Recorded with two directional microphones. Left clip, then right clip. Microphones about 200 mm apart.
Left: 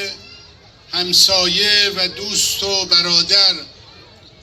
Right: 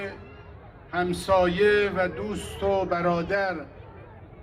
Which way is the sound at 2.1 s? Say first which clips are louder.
Left 13 dB; 15° right (ahead or behind).